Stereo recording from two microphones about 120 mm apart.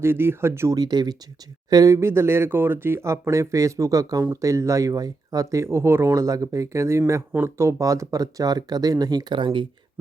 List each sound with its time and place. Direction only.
0.0 s speech: 20° right (ahead or behind)
0.8 s speech: 35° right (ahead or behind)